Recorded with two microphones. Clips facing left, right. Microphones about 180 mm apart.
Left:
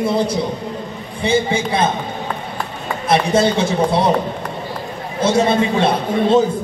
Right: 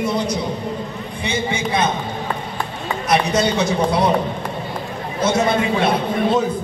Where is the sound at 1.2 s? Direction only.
30° left (ahead or behind).